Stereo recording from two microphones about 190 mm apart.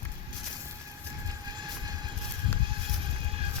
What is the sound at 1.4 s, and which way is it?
Vehicle, 20° right (ahead or behind).